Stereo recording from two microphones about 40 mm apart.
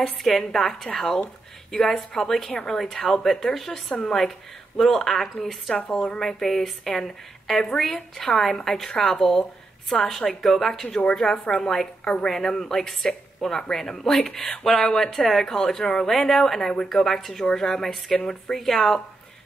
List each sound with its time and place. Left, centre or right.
0.3 s speech: centre
12.0 s speech: left
12.3 s speech: centre